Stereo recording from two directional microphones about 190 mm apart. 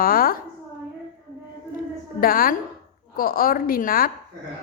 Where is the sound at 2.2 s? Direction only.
50° left (ahead or behind).